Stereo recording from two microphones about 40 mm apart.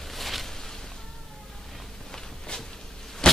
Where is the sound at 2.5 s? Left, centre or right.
Left.